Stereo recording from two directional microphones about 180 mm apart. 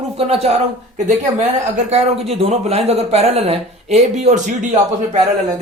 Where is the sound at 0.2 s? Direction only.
35° right (ahead or behind).